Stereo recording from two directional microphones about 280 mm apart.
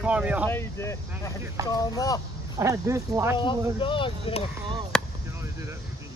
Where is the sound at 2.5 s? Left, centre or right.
Centre.